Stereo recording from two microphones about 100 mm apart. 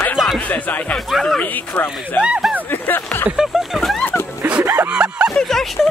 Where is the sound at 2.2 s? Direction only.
10° right (ahead or behind).